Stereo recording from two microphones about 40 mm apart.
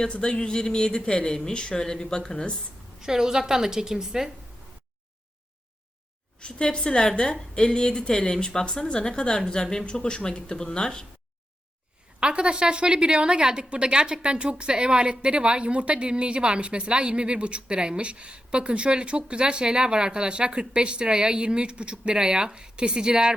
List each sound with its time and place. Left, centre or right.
0.1 s speech: left
3.0 s a woman's voice: centre
6.4 s speech: left
12.2 s a woman's voice: right